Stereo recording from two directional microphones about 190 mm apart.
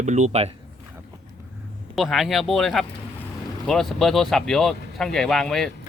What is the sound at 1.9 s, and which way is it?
Speech, centre (ahead or behind).